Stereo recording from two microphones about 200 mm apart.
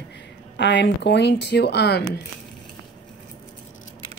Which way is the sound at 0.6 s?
60° left (ahead or behind).